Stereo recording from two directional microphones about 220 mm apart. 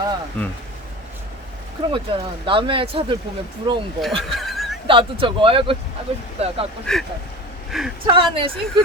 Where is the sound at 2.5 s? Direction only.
25° right (ahead or behind).